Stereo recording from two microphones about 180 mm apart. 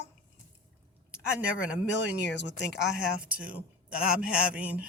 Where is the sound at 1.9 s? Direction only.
80° left.